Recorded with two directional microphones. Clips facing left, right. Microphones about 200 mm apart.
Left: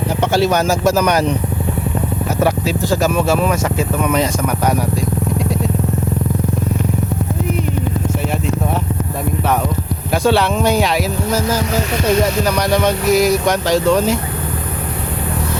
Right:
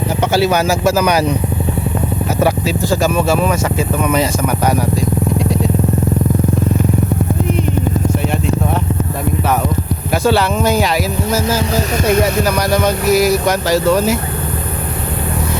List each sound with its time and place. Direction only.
0.2 s speech: 5° right (ahead or behind)
2.4 s speech: centre (ahead or behind)
10.2 s speech: centre (ahead or behind)
11.7 s speech: 35° right (ahead or behind)
12.4 s speech: 5° right (ahead or behind)